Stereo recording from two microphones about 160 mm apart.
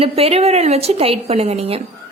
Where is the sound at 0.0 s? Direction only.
40° right (ahead or behind).